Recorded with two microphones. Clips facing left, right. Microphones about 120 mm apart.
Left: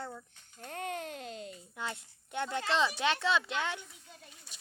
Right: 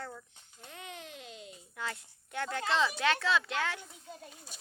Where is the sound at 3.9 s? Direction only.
40° right (ahead or behind).